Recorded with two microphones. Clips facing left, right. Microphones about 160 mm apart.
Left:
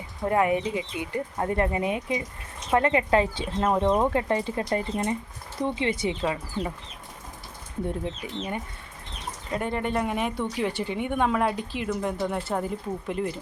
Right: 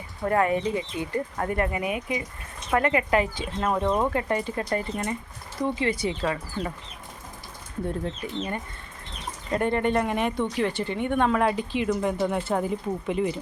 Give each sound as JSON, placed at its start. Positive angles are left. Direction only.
{"t": 0.2, "sound": "speech", "side_deg": 15}
{"t": 1.5, "sound": "speech", "side_deg": 25}
{"t": 3.7, "sound": "speech", "side_deg": 15}
{"t": 8.0, "sound": "speech", "side_deg": 10}